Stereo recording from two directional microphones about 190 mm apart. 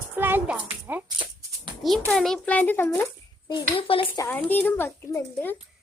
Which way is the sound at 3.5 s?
25° left (ahead or behind).